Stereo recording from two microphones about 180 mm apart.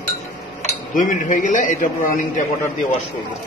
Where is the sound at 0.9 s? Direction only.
45° left (ahead or behind).